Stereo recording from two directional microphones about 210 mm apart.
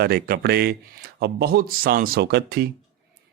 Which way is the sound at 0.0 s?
50° right (ahead or behind).